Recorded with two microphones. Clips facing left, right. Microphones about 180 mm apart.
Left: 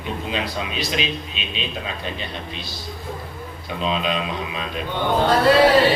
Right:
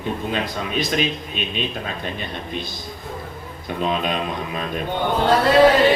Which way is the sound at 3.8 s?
50° right (ahead or behind).